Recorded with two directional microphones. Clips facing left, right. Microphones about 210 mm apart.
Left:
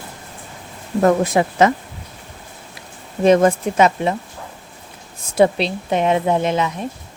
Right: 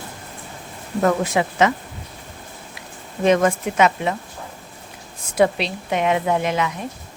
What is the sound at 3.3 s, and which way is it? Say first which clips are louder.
Speech: left 4 dB; 35° left (ahead or behind).